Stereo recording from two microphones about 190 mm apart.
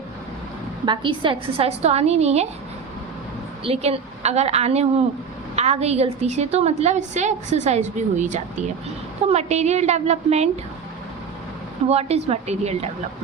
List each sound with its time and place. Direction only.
0.9 s a woman's voice: 25° right (ahead or behind)
3.6 s a woman's voice: 30° right (ahead or behind)
11.9 s a woman's voice: 35° right (ahead or behind)